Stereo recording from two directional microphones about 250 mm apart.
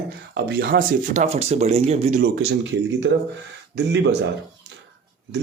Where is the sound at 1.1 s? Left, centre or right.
Right.